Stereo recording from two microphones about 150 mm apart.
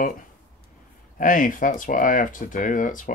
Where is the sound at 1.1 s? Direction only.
60° left (ahead or behind).